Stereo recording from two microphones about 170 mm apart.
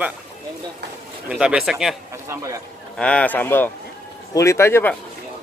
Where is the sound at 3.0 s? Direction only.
5° left (ahead or behind).